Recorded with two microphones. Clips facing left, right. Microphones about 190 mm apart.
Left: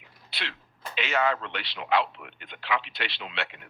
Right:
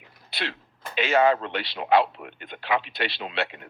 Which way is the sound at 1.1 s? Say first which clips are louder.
Right 7 dB; 30° right (ahead or behind).